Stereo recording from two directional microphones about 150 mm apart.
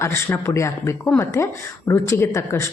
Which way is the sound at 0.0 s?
15° left (ahead or behind).